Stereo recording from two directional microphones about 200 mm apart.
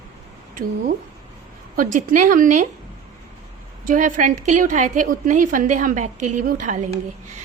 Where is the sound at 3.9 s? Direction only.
40° right (ahead or behind).